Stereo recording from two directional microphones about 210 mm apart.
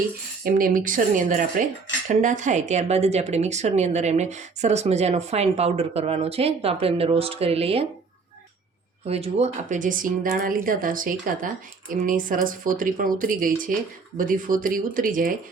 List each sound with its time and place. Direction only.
0.4 s speech: 40° right (ahead or behind)
9.0 s speech: 30° right (ahead or behind)